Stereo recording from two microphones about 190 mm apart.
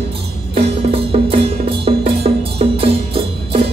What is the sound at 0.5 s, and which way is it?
Music, 30° right (ahead or behind).